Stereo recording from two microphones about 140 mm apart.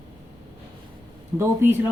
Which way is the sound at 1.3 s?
15° right (ahead or behind).